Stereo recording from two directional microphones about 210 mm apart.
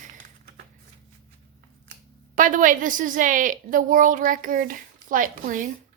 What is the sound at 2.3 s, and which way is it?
A woman's voice, 40° right (ahead or behind).